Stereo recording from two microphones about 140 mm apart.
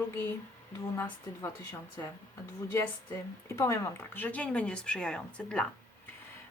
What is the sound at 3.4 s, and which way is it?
Speech, 20° left (ahead or behind).